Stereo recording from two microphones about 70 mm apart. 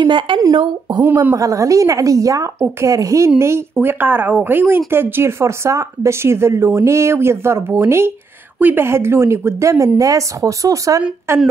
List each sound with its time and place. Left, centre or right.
0.0 s speech: right
1.3 s speech: right
3.8 s speech: right
8.5 s speech: right
8.8 s speech: right
11.3 s humming: right